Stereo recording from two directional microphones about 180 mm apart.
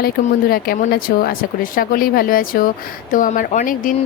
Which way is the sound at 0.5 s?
55° left (ahead or behind).